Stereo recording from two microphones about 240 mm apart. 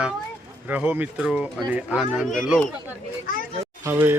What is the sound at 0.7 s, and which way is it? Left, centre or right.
A man's voice, centre.